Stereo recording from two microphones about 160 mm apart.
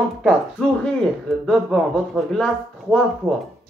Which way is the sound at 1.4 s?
Centre (ahead or behind).